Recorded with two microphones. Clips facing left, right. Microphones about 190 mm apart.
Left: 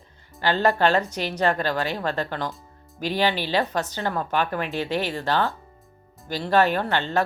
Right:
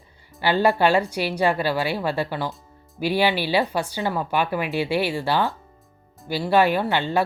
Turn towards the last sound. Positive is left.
turn(degrees=-10)  # may be behind; listen again after turning